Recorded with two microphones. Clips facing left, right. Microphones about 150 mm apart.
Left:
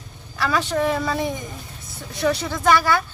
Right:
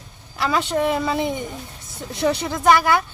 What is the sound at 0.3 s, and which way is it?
A woman's voice, 20° right (ahead or behind).